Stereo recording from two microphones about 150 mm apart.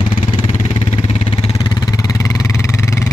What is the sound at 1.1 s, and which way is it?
Vehicle, 40° left (ahead or behind).